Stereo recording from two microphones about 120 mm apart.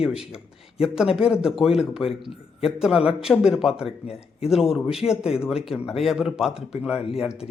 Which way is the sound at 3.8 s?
55° left (ahead or behind).